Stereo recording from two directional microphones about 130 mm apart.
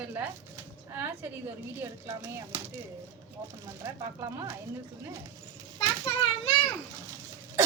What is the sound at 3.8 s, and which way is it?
Speech, 25° right (ahead or behind).